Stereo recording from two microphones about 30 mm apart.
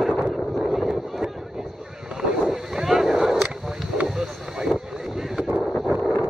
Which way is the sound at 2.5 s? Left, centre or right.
Centre.